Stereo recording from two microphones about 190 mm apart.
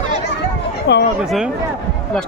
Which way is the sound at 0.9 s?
65° left (ahead or behind).